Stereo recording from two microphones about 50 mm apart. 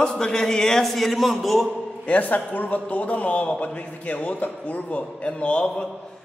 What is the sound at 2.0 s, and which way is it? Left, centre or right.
A man's voice, left.